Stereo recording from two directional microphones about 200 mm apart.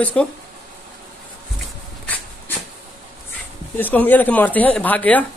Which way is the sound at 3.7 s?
10° left (ahead or behind).